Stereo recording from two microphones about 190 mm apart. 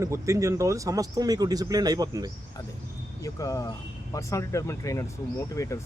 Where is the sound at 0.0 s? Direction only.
15° right (ahead or behind).